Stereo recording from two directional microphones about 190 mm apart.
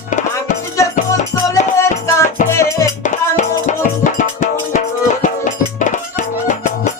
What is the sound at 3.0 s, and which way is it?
Music, 40° left (ahead or behind).